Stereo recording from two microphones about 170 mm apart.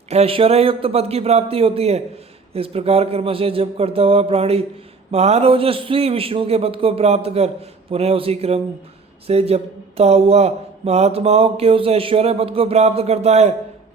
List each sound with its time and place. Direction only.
0.1 s speech: 35° right (ahead or behind)